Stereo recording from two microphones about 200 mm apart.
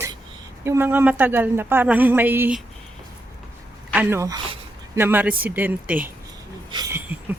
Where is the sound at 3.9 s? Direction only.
10° right (ahead or behind).